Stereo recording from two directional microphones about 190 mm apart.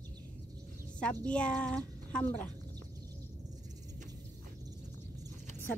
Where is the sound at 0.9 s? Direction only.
5° left (ahead or behind).